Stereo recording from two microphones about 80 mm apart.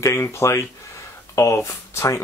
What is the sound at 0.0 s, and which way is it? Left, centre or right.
Speech, left.